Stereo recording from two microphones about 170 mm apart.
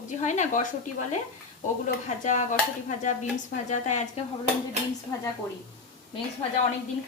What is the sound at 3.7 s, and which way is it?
Speech, 45° left (ahead or behind).